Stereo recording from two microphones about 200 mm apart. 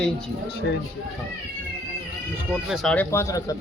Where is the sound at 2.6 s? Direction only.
Centre (ahead or behind); by 3.6 s 15° left (ahead or behind).